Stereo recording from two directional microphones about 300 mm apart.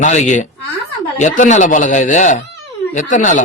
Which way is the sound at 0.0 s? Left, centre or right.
Left.